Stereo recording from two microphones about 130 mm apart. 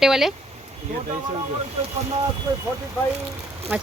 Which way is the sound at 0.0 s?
5° right (ahead or behind).